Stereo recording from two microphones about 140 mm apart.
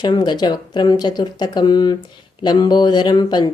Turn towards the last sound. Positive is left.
turn(degrees=30)  # may be behind; listen again after turning